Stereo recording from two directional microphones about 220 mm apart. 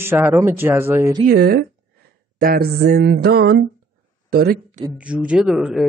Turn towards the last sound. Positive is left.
turn(degrees=-5)  # may be behind; listen again after turning